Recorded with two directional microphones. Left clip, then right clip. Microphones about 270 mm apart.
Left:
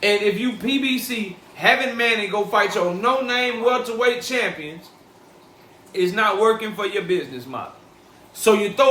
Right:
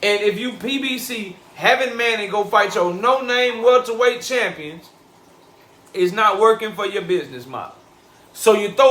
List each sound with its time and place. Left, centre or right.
0.0 s a man's voice: centre
5.9 s a man's voice: centre